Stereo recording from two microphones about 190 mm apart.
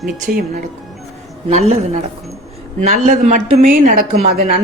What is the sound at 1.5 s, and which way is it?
Speech, 35° right (ahead or behind).